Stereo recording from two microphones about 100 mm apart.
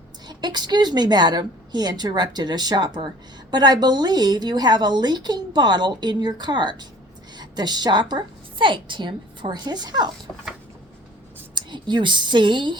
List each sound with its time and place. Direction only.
0.3 s a woman's voice: 45° right (ahead or behind)
11.5 s a woman's voice: 50° right (ahead or behind)